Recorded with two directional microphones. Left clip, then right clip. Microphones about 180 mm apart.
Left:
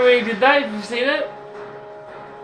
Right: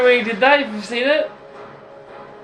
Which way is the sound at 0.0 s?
25° right (ahead or behind).